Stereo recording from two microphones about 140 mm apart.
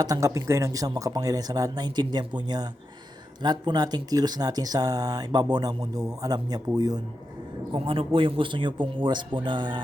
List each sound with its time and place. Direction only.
0.0 s speech: 25° right (ahead or behind)
7.7 s speech: 40° right (ahead or behind)